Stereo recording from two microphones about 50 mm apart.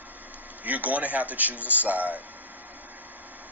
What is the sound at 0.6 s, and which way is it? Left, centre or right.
A man's voice, right.